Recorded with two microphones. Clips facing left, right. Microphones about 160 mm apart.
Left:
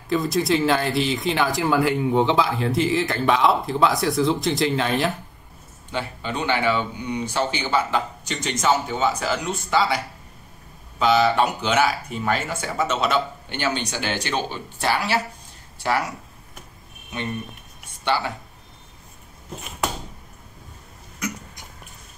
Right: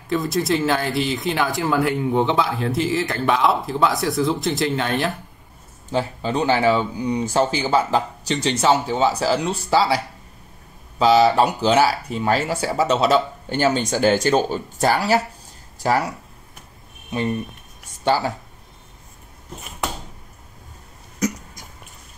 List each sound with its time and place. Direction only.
0.1 s speech: centre (ahead or behind)
5.9 s speech: 35° right (ahead or behind)
18.0 s speech: 40° right (ahead or behind)